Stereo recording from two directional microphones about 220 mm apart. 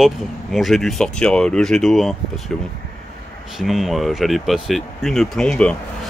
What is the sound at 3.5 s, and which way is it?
Speech, centre (ahead or behind).